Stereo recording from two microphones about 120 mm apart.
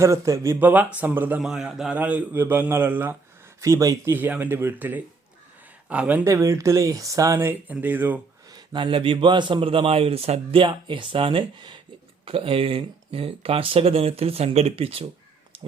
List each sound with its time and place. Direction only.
0.0 s a man's voice: 25° right (ahead or behind)
1.4 s a man's voice: 5° right (ahead or behind)
6.2 s speech: 25° right (ahead or behind)
8.4 s a man's voice: 40° right (ahead or behind)